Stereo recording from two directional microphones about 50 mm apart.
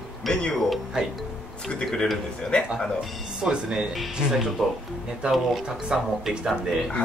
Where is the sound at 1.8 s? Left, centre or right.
Centre.